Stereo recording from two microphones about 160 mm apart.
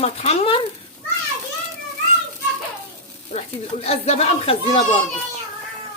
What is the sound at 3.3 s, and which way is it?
Speech, 40° left (ahead or behind).